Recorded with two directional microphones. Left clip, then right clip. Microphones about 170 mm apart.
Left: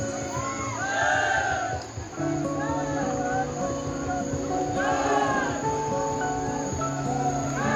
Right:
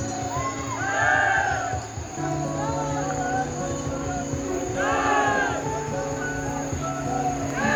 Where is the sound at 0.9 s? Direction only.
30° left (ahead or behind).